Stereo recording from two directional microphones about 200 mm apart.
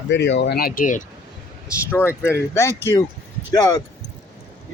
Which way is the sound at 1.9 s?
10° left (ahead or behind).